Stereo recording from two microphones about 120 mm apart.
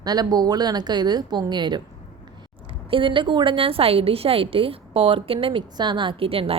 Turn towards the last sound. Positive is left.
turn(degrees=-50)  # may be behind; listen again after turning